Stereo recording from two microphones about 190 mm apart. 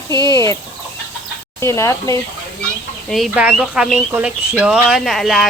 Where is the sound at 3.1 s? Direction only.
Centre (ahead or behind).